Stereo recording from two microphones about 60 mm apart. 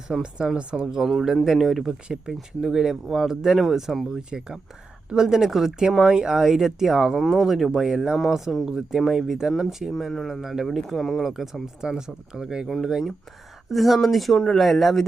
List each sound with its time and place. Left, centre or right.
0.1 s speech: centre
9.9 s speech: centre